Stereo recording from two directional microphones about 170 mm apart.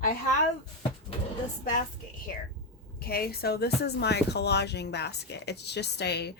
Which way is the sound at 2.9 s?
65° left (ahead or behind).